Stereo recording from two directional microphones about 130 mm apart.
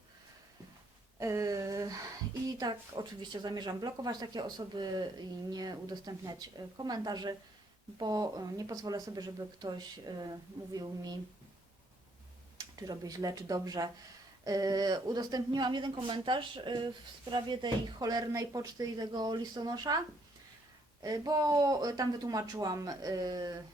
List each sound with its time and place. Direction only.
1.2 s a sound: 25° right (ahead or behind)
2.6 s a woman's voice: 35° right (ahead or behind)
12.5 s a woman's voice: 30° right (ahead or behind)
21.0 s speech: 30° right (ahead or behind)